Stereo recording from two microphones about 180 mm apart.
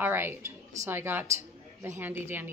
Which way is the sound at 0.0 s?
10° right (ahead or behind).